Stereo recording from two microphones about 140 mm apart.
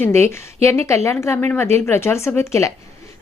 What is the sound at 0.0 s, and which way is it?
Speech, 20° left (ahead or behind).